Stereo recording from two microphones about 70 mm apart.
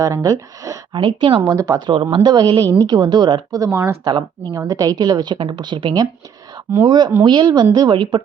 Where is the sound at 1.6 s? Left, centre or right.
Right.